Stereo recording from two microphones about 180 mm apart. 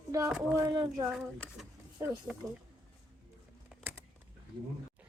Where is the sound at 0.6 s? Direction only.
20° right (ahead or behind).